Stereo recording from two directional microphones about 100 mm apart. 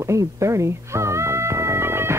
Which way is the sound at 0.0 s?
30° right (ahead or behind).